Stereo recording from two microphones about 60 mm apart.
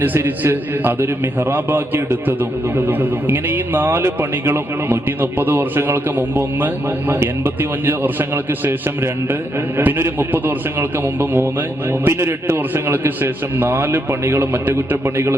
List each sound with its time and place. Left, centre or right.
0.0 s a man's voice: right
9.7 s a man's voice: right